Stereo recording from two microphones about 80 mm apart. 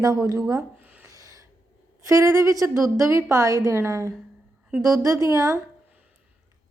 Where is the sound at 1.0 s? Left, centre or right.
Right.